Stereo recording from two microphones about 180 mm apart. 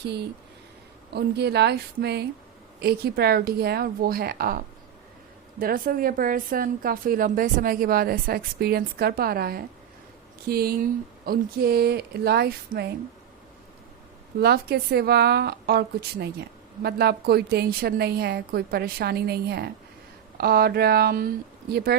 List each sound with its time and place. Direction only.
0.0 s a woman's voice: 65° right (ahead or behind)
14.3 s a woman's voice: 60° right (ahead or behind)